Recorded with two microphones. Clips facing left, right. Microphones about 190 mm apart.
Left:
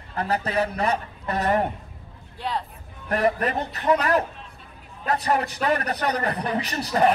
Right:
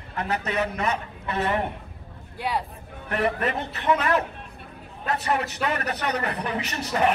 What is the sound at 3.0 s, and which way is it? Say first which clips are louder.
A man's voice: left 2 dB; 40° left (ahead or behind).